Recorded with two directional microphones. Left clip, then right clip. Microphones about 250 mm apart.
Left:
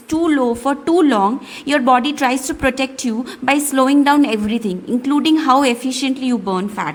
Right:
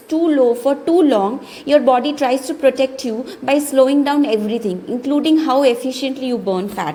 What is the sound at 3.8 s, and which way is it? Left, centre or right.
A woman's voice, left.